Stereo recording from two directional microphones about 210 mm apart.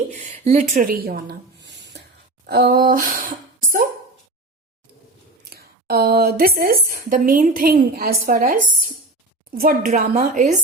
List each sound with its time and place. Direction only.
0.1 s a sound: 30° right (ahead or behind); by 2.0 s 55° right (ahead or behind)
2.5 s speech: 50° right (ahead or behind)
5.5 s a woman's voice: 45° right (ahead or behind)